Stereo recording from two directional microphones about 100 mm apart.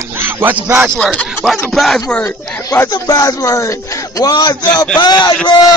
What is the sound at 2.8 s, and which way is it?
A man's voice, 40° left (ahead or behind).